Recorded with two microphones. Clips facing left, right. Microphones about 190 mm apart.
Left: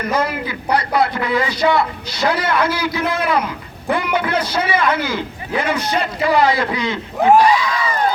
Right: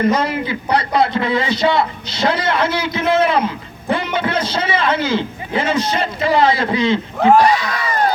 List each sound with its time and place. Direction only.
0.0 s a man's voice: 25° right (ahead or behind)
7.4 s speech: 40° right (ahead or behind)